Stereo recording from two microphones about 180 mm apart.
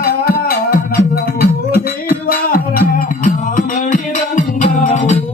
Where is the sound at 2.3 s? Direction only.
55° left (ahead or behind).